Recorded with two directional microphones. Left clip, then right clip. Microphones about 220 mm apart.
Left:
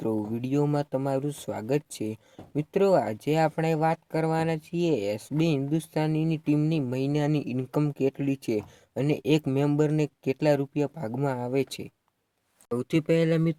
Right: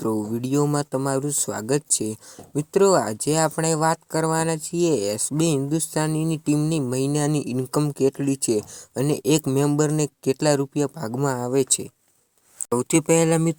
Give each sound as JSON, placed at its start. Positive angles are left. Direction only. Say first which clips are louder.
{"t": 0.0, "sound": "speech", "louder": "right 4 dB", "side_deg": -25}